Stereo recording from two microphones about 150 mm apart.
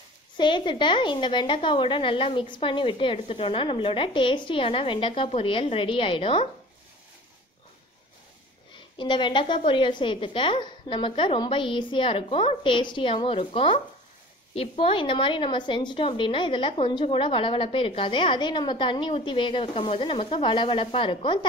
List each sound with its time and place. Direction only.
0.4 s a woman's voice: 30° left (ahead or behind)
8.9 s a woman's voice: 30° left (ahead or behind)